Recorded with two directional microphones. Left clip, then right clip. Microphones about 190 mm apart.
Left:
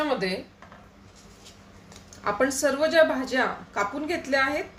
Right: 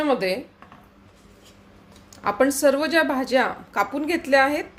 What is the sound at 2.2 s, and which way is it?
A woman's voice, 45° right (ahead or behind).